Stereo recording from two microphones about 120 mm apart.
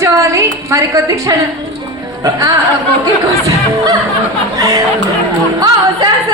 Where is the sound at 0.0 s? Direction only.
25° right (ahead or behind).